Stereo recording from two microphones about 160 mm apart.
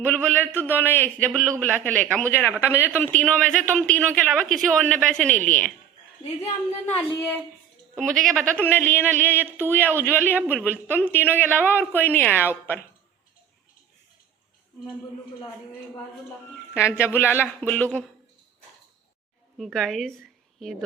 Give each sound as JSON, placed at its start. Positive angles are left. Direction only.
{"t": 0.3, "sound": "a man's voice", "side_deg": 10}
{"t": 6.2, "sound": "speech", "side_deg": 40}
{"t": 6.8, "sound": "a man's voice", "side_deg": 10}
{"t": 9.4, "sound": "speech", "side_deg": -10}
{"t": 9.6, "sound": "a man's voice", "side_deg": 10}
{"t": 16.7, "sound": "a man's voice", "side_deg": 15}
{"t": 19.5, "sound": "a woman's voice", "side_deg": 0}